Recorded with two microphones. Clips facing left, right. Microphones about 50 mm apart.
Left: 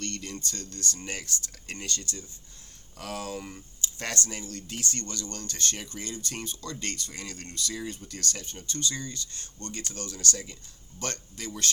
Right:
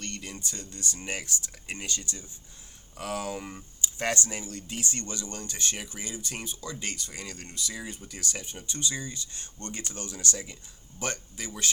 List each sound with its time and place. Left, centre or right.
0.0 s speech: centre